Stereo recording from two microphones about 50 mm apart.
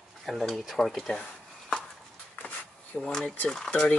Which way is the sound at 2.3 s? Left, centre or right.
Left.